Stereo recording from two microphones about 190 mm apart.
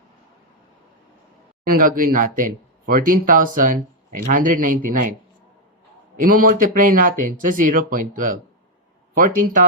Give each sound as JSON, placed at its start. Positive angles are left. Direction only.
{"t": 1.6, "sound": "a sound", "side_deg": -50}
{"t": 2.0, "sound": "speech", "side_deg": -45}
{"t": 6.1, "sound": "speech", "side_deg": -45}